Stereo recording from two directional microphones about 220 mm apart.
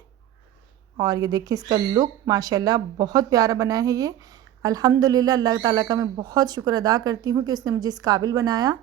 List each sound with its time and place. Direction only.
0.9 s speech: 15° right (ahead or behind)